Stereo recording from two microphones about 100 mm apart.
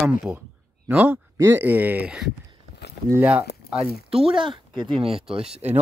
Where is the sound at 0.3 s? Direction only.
40° right (ahead or behind).